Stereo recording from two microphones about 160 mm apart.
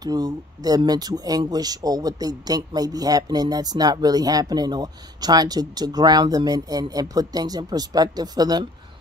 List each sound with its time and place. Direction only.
0.0 s speech: 25° right (ahead or behind)